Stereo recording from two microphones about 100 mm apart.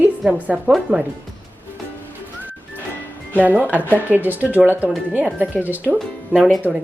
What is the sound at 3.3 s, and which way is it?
Speech, 15° right (ahead or behind).